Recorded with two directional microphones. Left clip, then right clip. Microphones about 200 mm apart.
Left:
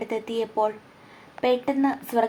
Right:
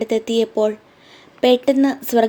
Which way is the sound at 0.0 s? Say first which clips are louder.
Right 9 dB; 60° right (ahead or behind).